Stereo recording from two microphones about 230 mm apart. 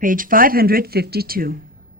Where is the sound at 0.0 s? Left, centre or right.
Right.